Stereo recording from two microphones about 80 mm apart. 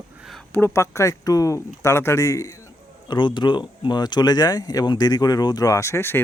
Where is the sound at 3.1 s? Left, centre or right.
Left.